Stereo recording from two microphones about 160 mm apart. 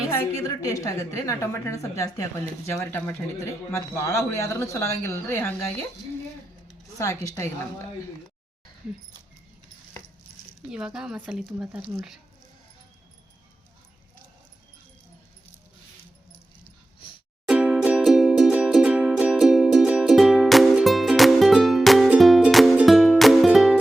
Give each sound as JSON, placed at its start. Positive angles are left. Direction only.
{"t": 0.4, "sound": "a woman's voice", "side_deg": 20}
{"t": 7.0, "sound": "a woman's voice", "side_deg": 20}
{"t": 10.7, "sound": "speech", "side_deg": -5}
{"t": 17.5, "sound": "music", "side_deg": -5}